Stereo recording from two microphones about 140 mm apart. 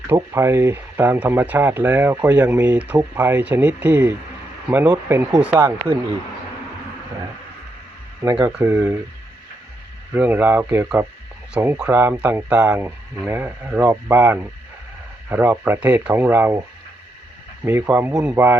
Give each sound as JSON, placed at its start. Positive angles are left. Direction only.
{"t": 0.1, "sound": "speech", "side_deg": -20}
{"t": 8.4, "sound": "speech", "side_deg": -15}
{"t": 10.2, "sound": "speech", "side_deg": -15}
{"t": 17.7, "sound": "speech", "side_deg": -10}